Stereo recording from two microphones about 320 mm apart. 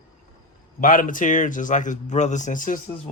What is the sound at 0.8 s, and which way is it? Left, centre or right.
Speech, left.